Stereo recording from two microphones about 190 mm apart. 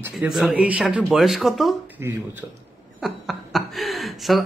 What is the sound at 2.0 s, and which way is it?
Speech, 15° right (ahead or behind).